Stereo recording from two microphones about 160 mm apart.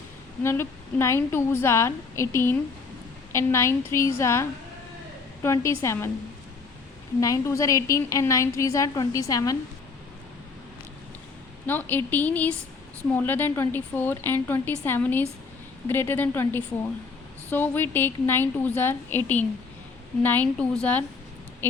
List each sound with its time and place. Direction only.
0.4 s a woman's voice: 15° left (ahead or behind)
7.2 s a woman's voice: 20° left (ahead or behind)
11.6 s a woman's voice: 10° left (ahead or behind)